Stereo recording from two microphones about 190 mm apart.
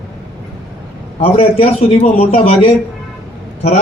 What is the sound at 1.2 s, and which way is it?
A man's voice, 30° left (ahead or behind).